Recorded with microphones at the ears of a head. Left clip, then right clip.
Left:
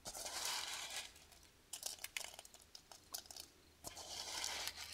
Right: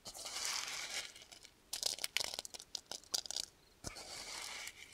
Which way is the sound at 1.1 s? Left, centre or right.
Right.